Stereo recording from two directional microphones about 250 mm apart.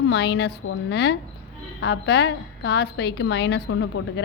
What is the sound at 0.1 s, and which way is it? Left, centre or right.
A woman's voice, left.